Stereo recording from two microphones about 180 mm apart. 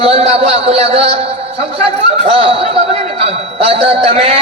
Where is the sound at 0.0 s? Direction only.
35° right (ahead or behind).